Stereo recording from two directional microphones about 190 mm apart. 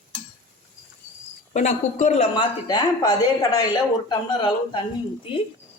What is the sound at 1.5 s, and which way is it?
Speech, 40° left (ahead or behind).